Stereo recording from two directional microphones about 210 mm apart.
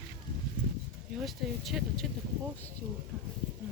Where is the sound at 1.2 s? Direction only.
Centre (ahead or behind).